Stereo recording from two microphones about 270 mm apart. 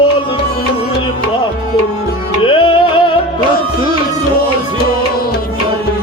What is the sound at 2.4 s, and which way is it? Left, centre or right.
Music, centre.